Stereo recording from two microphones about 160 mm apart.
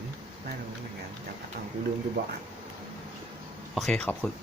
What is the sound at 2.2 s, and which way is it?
Speech, 90° right.